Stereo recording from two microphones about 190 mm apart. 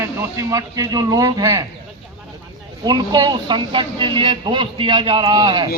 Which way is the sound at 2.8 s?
20° right (ahead or behind).